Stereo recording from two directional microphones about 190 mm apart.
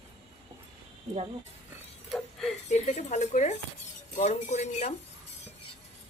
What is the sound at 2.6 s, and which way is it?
Speech, 35° left (ahead or behind).